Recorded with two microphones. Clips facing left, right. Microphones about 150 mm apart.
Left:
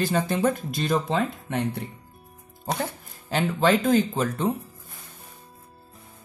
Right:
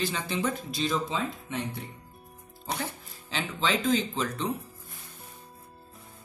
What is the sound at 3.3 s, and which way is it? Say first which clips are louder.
Speech: left 8 dB; 50° left (ahead or behind).